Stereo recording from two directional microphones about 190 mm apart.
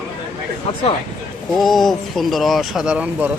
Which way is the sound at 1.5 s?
Centre (ahead or behind).